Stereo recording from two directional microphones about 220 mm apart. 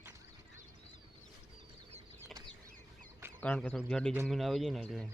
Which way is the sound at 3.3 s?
5° left (ahead or behind).